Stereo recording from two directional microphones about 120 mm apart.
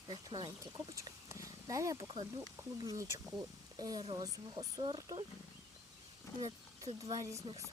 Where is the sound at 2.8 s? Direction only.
30° right (ahead or behind).